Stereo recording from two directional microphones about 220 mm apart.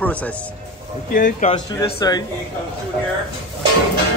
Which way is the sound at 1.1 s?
35° left (ahead or behind).